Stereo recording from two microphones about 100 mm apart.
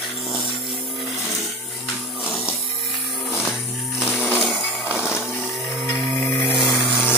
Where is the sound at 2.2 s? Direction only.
5° right (ahead or behind).